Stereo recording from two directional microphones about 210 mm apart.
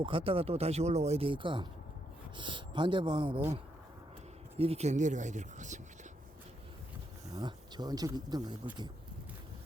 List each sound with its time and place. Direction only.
0.0 s speech: 25° right (ahead or behind)
4.5 s speech: 30° right (ahead or behind)
7.3 s speech: 20° right (ahead or behind)